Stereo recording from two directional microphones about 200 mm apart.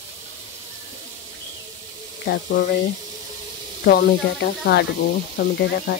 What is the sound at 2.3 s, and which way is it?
Speech, 50° left (ahead or behind).